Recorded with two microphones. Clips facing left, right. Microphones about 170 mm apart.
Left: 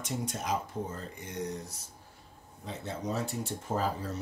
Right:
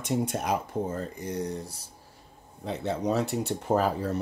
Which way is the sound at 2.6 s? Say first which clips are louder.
Right 8 dB; 70° right (ahead or behind).